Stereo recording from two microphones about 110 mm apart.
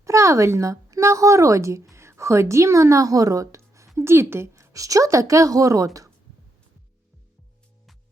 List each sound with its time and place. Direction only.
0.0 s a woman's voice: 30° right (ahead or behind)